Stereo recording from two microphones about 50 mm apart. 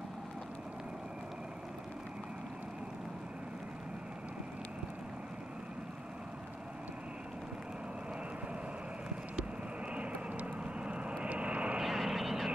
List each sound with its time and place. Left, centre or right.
9.9 s vehicle: right
11.8 s vehicle: centre